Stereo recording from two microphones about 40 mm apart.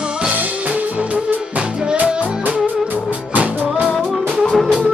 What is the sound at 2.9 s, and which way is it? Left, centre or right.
Music, right.